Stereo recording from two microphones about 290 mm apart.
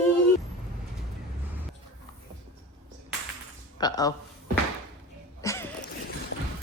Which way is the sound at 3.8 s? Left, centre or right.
Centre.